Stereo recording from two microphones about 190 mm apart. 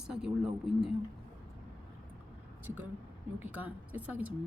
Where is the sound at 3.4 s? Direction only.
10° right (ahead or behind).